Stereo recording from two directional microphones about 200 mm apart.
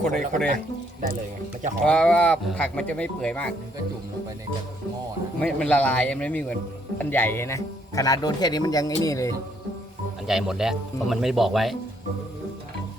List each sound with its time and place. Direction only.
0.0 s speech: centre (ahead or behind)
1.8 s speech: 5° left (ahead or behind)
5.4 s speech: 5° left (ahead or behind)
10.2 s speech: 5° right (ahead or behind)